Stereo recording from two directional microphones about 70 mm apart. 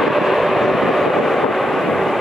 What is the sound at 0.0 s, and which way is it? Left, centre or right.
Train, centre.